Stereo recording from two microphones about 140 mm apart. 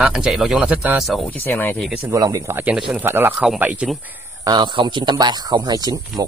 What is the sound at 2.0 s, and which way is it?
A man's voice, 25° right (ahead or behind).